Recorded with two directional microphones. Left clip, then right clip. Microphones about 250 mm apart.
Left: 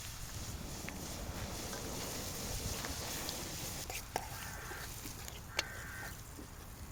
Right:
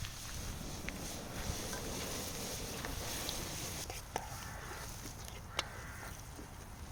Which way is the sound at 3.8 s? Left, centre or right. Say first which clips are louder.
Left 1 dB; centre.